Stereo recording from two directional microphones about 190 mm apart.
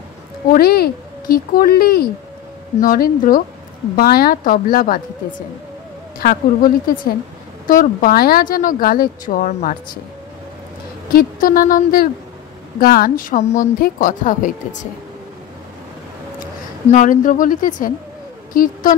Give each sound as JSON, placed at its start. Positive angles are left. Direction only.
{"t": 0.5, "sound": "speech", "side_deg": 55}
{"t": 6.1, "sound": "speech", "side_deg": 50}
{"t": 11.1, "sound": "speech", "side_deg": 50}
{"t": 16.9, "sound": "speech", "side_deg": 45}